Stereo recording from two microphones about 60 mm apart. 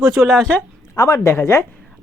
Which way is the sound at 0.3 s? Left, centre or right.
Centre.